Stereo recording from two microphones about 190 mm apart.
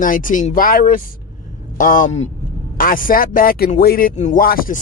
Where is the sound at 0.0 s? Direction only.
45° left (ahead or behind).